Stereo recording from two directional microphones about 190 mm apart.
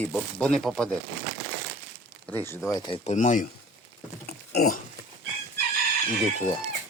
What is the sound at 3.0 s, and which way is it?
Speech, 35° left (ahead or behind).